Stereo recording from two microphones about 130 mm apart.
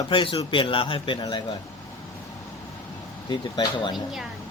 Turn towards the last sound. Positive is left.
turn(degrees=0)  # may be behind; listen again after turning